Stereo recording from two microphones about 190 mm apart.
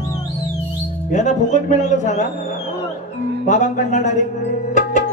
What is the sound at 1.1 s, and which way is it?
A man's voice, 40° left (ahead or behind).